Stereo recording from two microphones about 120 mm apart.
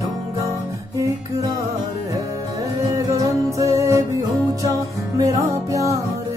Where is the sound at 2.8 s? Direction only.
30° right (ahead or behind).